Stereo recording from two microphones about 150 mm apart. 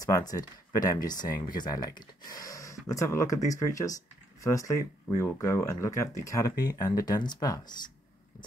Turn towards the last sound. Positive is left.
turn(degrees=25)  # may be behind; listen again after turning